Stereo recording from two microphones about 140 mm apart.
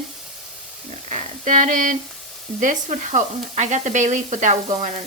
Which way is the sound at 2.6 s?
65° right (ahead or behind).